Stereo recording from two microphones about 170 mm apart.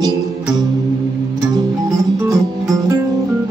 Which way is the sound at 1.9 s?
20° right (ahead or behind).